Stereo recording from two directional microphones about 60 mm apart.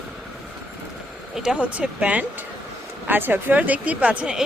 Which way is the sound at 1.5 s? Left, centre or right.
Right.